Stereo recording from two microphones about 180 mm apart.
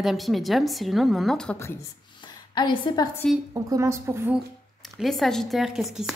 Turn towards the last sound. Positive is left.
turn(degrees=0)  # may be behind; listen again after turning